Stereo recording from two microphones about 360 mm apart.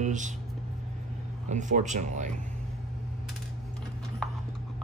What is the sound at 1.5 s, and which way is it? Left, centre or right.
Speech, right.